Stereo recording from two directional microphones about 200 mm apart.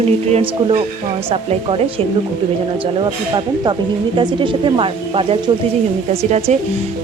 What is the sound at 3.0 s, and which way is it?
Speech, 20° right (ahead or behind).